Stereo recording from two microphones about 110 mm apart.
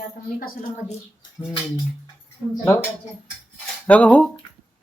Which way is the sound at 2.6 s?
20° left (ahead or behind).